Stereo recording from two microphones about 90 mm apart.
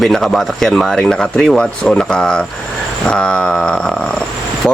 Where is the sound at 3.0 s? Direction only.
10° left (ahead or behind).